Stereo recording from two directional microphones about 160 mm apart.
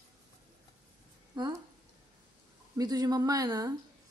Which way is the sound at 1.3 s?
25° right (ahead or behind).